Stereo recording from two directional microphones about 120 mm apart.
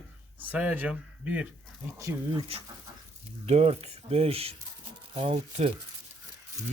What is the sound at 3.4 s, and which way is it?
Speech, 60° right (ahead or behind).